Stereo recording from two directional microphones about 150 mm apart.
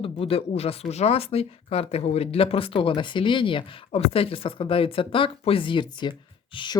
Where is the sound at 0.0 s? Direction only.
40° left (ahead or behind).